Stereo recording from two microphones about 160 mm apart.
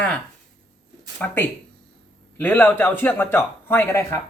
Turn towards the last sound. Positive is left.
turn(degrees=15)  # may be behind; listen again after turning